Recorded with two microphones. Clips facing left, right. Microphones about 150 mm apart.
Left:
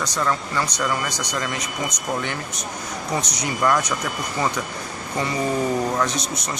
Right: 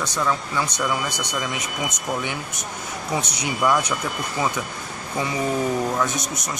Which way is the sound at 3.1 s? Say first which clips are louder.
Even; 5° right (ahead or behind).